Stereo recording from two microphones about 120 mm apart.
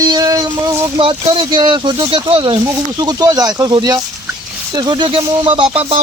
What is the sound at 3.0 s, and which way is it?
Speech, 35° right (ahead or behind).